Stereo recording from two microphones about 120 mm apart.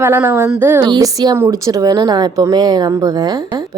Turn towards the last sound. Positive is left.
turn(degrees=-35)  # may be behind; listen again after turning